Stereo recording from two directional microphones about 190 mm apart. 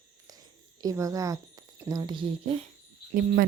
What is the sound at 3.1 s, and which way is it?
Cricket, 50° right (ahead or behind).